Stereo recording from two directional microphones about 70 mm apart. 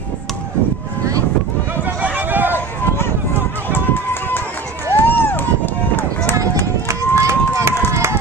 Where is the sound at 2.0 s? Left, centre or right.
Right.